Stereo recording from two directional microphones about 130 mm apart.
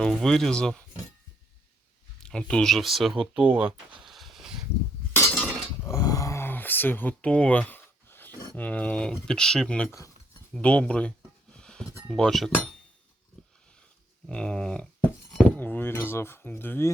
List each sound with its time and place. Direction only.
0.0 s speech: 5° left (ahead or behind)
2.2 s speech: 5° left (ahead or behind); by 3.8 s 15° right (ahead or behind)
4.0 s a sound: centre (ahead or behind)
5.1 s a sound: 15° left (ahead or behind)
8.5 s speech: 10° left (ahead or behind)
11.5 s music: 5° left (ahead or behind)
12.1 s speech: 5° left (ahead or behind)
13.4 s dog: 5° left (ahead or behind)
14.3 s speech: 5° left (ahead or behind)